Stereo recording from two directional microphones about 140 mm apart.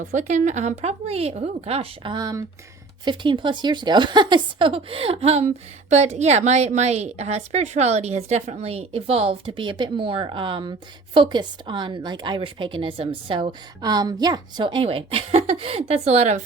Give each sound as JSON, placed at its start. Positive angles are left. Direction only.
{"t": 0.0, "sound": "speech", "side_deg": -60}
{"t": 2.1, "sound": "a woman's voice", "side_deg": -25}